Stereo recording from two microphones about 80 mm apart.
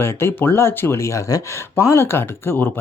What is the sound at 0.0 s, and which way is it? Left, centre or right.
Speech, left.